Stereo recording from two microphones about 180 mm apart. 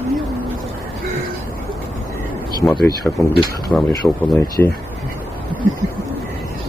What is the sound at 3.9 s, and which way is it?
Speech, 20° left (ahead or behind).